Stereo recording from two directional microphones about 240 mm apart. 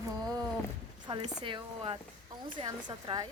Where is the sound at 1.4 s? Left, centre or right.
Centre.